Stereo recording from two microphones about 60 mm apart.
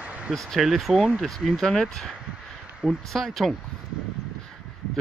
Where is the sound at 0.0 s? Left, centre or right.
Right.